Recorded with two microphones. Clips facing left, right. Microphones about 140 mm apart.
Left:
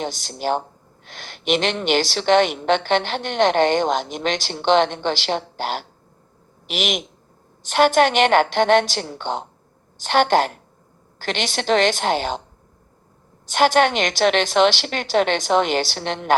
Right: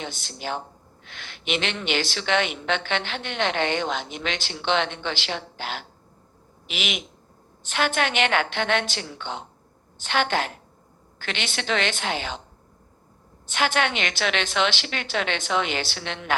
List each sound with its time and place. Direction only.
0.0 s speech: 40° left (ahead or behind)
13.5 s speech: 40° left (ahead or behind)